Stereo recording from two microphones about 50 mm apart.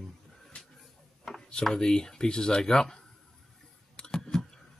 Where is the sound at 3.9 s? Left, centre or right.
Centre.